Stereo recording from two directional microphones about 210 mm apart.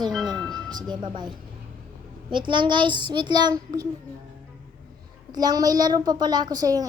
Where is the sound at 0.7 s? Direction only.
20° right (ahead or behind).